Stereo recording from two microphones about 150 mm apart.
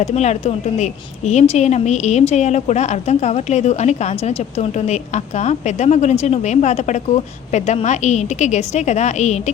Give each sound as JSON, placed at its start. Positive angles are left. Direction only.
{"t": 0.0, "sound": "a woman's voice", "side_deg": 50}